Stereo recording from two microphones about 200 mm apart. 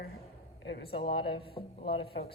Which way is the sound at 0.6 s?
60° left (ahead or behind).